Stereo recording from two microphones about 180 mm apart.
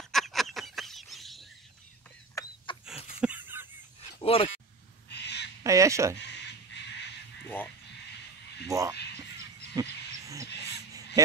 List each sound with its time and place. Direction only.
0.1 s bird: centre (ahead or behind)
2.3 s a sound: 30° left (ahead or behind)
3.2 s goose: 10° right (ahead or behind)
4.2 s a sound: 30° left (ahead or behind)
5.1 s owl: 70° left (ahead or behind)
5.6 s speech: 15° right (ahead or behind)
6.1 s a sound: 70° left (ahead or behind)
7.4 s speech: 10° left (ahead or behind)
8.6 s speech: 15° right (ahead or behind)
9.8 s a sound: 20° right (ahead or behind)
10.5 s crow: 65° left (ahead or behind)
11.2 s speech: 20° right (ahead or behind)